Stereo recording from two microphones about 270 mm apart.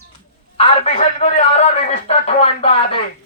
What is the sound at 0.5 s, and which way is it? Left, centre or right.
A man's voice, left.